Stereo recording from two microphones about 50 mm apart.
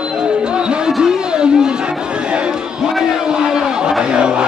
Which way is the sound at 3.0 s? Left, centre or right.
Centre.